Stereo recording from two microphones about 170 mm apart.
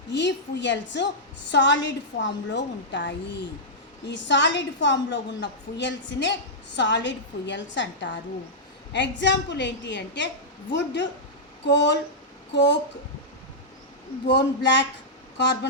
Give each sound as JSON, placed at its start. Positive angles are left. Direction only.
{"t": 0.1, "sound": "a woman's voice", "side_deg": 90}
{"t": 14.3, "sound": "a woman's voice", "side_deg": 90}